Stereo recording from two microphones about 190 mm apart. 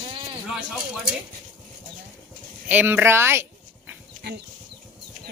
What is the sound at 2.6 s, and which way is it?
Speech, 10° right (ahead or behind).